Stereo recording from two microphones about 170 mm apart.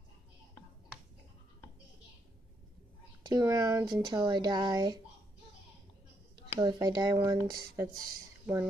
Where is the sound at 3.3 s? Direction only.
20° right (ahead or behind).